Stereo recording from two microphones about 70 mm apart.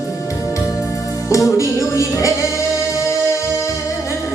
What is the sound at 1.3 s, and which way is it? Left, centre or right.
Music, left.